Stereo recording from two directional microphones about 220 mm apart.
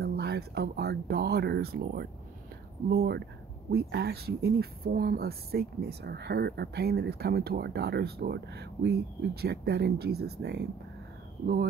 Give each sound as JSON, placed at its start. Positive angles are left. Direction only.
{"t": 0.0, "sound": "speech", "side_deg": -45}